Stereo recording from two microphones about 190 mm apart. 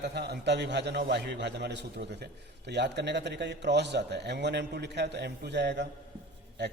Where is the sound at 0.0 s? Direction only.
60° right (ahead or behind).